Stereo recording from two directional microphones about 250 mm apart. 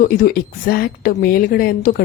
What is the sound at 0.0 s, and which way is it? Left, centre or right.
A woman's voice, left.